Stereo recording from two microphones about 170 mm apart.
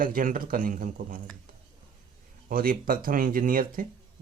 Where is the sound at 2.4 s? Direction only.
55° right (ahead or behind).